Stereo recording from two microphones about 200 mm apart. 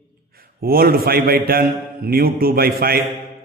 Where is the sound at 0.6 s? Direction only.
50° right (ahead or behind).